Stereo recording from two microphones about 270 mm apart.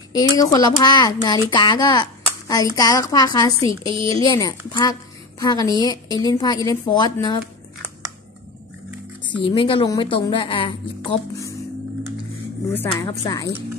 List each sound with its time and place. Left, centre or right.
0.1 s a woman's voice: centre
3.6 s a woman's voice: centre
4.4 s a woman's voice: centre
9.2 s a woman's voice: centre
12.7 s a woman's voice: centre